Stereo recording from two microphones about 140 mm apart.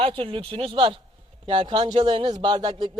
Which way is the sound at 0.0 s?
40° right (ahead or behind).